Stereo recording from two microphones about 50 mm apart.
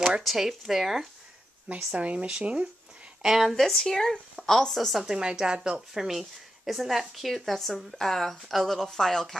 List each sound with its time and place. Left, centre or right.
0.2 s speech: centre
2.0 s speech: right
3.2 s speech: centre
3.5 s speech: centre
5.2 s speech: centre